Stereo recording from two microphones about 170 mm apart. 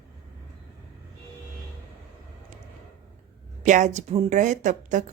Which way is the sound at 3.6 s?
45° right (ahead or behind).